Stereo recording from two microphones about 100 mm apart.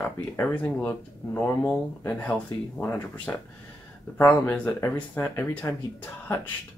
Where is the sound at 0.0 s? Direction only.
10° left (ahead or behind).